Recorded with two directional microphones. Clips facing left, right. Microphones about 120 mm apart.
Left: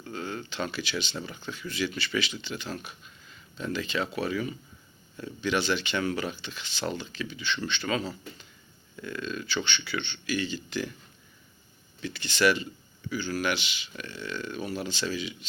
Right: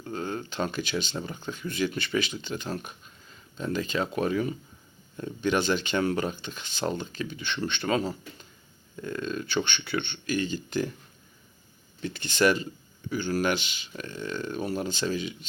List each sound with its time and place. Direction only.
0.0 s a sound: 40° right (ahead or behind)
1.2 s speech: 40° right (ahead or behind)
12.0 s speech: 45° right (ahead or behind)